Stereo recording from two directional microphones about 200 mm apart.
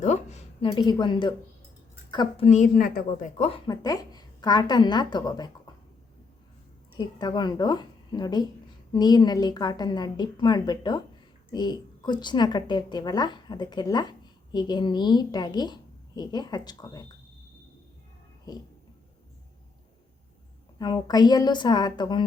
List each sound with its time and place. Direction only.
0.0 s a sound: 35° left (ahead or behind)
2.0 s a woman's voice: 20° left (ahead or behind)
2.5 s a woman's voice: 40° left (ahead or behind)
3.7 s a woman's voice: 20° left (ahead or behind)
6.9 s a woman's voice: 20° left (ahead or behind)
18.5 s a woman's voice: 20° left (ahead or behind)
20.7 s a woman's voice: 20° left (ahead or behind)